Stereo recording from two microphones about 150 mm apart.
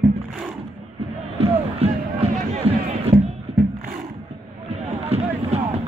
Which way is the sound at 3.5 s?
45° right (ahead or behind).